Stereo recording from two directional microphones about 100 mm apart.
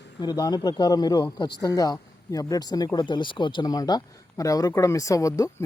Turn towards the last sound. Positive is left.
turn(degrees=35)  # may be behind; listen again after turning